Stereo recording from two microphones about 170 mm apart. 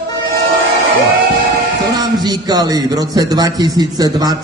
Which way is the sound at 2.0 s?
25° right (ahead or behind).